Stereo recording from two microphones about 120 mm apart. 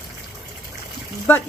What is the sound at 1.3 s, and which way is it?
Speech, 20° left (ahead or behind).